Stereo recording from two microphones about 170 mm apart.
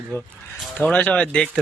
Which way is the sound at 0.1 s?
15° left (ahead or behind).